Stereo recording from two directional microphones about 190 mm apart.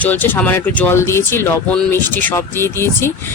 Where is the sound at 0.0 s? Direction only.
10° left (ahead or behind).